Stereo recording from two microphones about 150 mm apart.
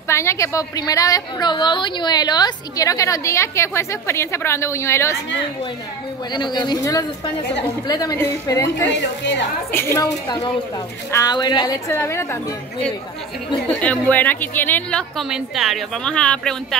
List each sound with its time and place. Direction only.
0.1 s a woman's voice: 20° left (ahead or behind)
6.3 s a woman's voice: 30° left (ahead or behind)
13.7 s a woman's voice: 10° left (ahead or behind)